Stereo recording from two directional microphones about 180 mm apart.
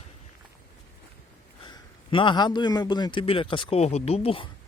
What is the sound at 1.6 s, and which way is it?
A man's voice, 25° left (ahead or behind).